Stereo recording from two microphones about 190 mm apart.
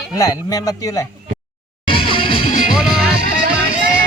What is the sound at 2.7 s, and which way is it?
Music, centre (ahead or behind).